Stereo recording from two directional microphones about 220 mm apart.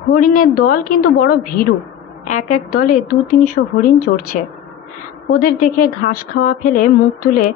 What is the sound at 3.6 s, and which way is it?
Speech, 55° left (ahead or behind).